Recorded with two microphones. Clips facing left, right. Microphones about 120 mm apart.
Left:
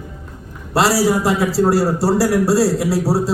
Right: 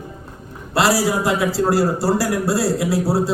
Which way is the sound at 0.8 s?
20° right (ahead or behind).